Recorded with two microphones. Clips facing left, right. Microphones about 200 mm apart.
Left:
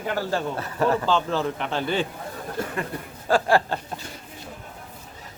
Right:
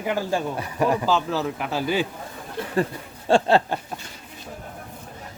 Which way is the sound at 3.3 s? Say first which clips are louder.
Right 2 dB; 25° right (ahead or behind).